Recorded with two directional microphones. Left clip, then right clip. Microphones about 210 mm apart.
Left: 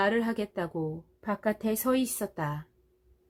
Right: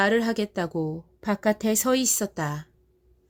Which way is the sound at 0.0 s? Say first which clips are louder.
Right 5 dB; 35° right (ahead or behind).